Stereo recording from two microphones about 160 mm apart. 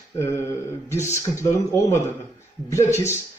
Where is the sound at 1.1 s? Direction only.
15° left (ahead or behind).